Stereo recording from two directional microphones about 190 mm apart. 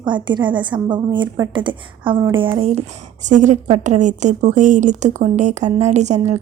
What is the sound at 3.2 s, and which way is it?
A woman's voice, 40° right (ahead or behind).